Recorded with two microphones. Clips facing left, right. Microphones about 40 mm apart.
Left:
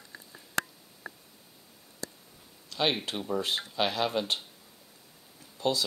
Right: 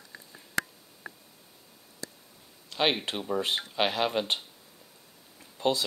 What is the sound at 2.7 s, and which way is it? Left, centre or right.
Speech, right.